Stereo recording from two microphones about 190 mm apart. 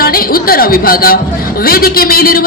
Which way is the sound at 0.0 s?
50° left (ahead or behind).